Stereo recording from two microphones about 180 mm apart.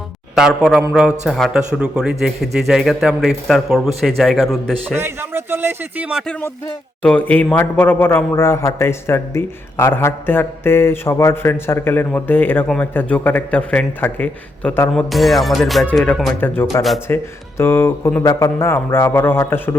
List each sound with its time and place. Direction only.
0.3 s speech: 5° right (ahead or behind)
4.9 s speech: 10° right (ahead or behind)
7.0 s a man's voice: 10° left (ahead or behind)